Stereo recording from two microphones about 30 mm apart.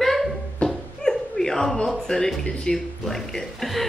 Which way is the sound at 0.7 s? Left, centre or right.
Centre.